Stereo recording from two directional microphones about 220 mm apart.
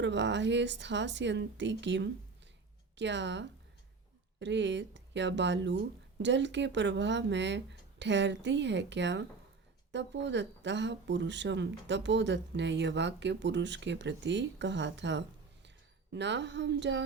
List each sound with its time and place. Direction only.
0.0 s a woman's voice: 55° right (ahead or behind)